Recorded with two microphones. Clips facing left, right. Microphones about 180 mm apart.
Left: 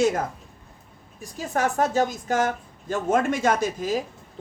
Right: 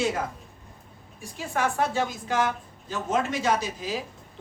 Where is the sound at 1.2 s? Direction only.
40° left (ahead or behind).